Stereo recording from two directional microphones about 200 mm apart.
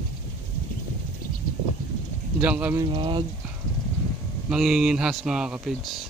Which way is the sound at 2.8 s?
25° right (ahead or behind).